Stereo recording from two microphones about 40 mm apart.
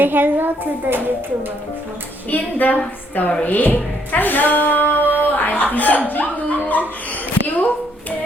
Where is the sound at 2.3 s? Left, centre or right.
Left.